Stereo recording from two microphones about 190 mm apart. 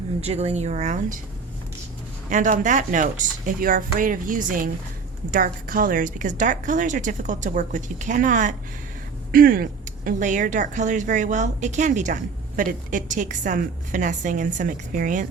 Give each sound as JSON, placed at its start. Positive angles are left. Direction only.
{"t": 0.2, "sound": "a woman's voice", "side_deg": -35}
{"t": 2.3, "sound": "speech", "side_deg": -45}